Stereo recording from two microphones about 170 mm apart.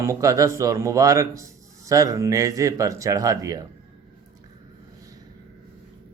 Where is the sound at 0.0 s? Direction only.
15° right (ahead or behind).